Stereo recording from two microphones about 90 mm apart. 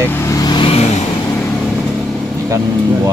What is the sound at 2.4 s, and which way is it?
Speech, 35° right (ahead or behind).